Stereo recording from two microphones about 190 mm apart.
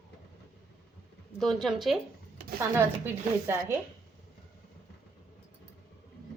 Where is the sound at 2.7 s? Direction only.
10° right (ahead or behind).